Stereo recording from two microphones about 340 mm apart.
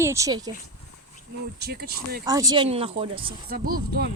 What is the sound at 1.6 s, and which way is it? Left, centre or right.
Speech, right.